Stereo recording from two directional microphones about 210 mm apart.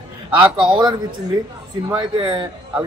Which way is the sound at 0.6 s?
20° right (ahead or behind).